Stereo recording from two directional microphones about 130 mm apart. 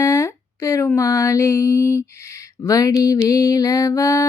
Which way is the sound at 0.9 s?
25° left (ahead or behind).